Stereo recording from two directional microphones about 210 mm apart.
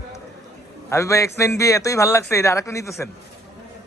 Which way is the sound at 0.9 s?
15° left (ahead or behind).